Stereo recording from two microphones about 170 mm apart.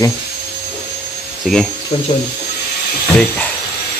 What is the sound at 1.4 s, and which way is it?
Speech, centre (ahead or behind).